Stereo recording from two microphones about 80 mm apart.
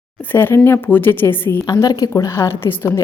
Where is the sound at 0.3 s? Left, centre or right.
Left.